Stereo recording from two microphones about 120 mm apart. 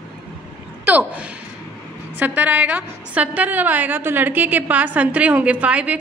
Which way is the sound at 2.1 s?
15° right (ahead or behind).